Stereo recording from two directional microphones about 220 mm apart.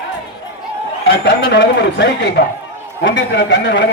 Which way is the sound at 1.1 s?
55° left (ahead or behind).